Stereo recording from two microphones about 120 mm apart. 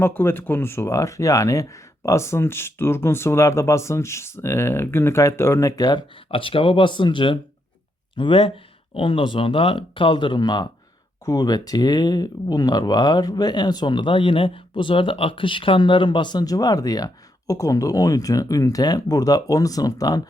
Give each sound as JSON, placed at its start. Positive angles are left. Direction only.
{"t": 0.0, "sound": "speech", "side_deg": 20}